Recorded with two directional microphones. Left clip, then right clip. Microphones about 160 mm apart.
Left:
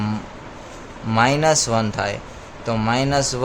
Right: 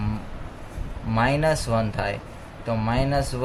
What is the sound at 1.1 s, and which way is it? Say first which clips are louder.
Speech: left 5 dB; 45° left (ahead or behind).